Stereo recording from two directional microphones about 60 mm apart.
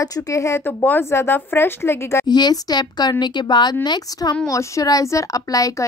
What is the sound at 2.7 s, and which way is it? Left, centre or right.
Speech, left.